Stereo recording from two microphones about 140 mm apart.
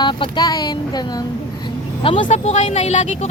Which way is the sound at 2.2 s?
50° left (ahead or behind).